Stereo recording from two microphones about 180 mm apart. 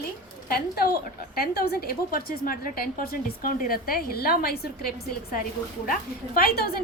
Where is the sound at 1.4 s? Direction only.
55° left (ahead or behind).